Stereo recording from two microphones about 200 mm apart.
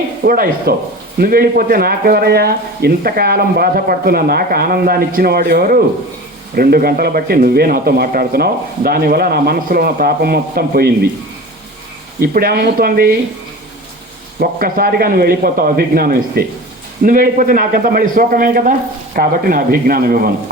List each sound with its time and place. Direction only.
0.3 s speech: 45° right (ahead or behind)
12.2 s speech: 45° right (ahead or behind)
14.3 s speech: 45° right (ahead or behind)